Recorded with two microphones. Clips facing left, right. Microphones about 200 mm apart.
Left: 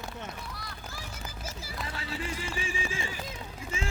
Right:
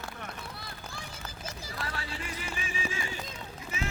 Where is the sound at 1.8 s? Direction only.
25° left (ahead or behind).